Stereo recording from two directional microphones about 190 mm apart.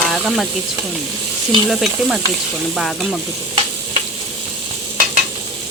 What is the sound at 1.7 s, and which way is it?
Speech, centre (ahead or behind).